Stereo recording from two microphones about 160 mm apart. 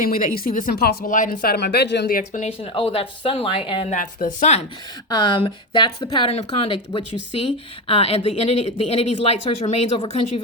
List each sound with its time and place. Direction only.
0.0 s speech: 60° left (ahead or behind)
2.4 s speech: 35° left (ahead or behind)
3.8 s speech: 55° left (ahead or behind)
5.0 s speech: 25° left (ahead or behind)
6.2 s speech: 40° left (ahead or behind)